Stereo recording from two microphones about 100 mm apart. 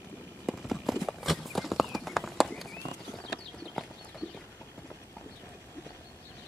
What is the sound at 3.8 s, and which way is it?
Clip-clop, centre (ahead or behind).